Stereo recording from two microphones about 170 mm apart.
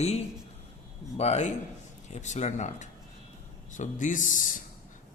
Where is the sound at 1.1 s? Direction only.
40° left (ahead or behind).